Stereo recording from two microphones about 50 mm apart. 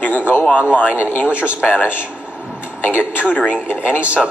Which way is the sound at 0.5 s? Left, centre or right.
Left.